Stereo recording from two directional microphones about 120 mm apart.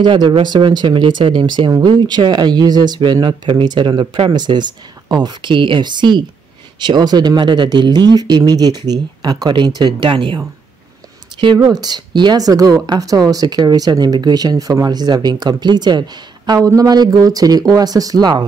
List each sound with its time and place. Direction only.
0.0 s speech: 40° right (ahead or behind)